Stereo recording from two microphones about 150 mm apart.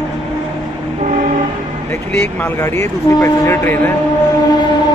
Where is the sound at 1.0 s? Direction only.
60° right (ahead or behind).